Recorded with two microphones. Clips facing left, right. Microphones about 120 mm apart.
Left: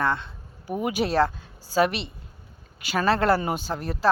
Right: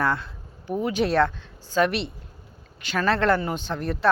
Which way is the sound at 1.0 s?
Centre (ahead or behind).